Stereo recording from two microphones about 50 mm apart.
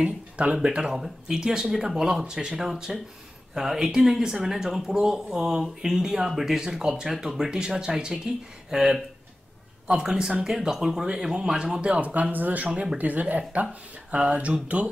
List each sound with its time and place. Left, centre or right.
0.0 s speech: centre
12.6 s speech: centre
12.9 s speech: right